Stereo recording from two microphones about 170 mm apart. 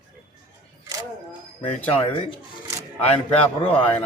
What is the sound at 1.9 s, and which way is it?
Speech, 35° left (ahead or behind).